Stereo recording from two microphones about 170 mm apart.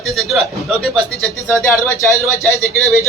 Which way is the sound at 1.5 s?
15° left (ahead or behind).